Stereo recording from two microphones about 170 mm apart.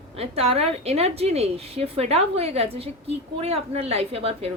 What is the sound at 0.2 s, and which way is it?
A woman's voice, 35° right (ahead or behind).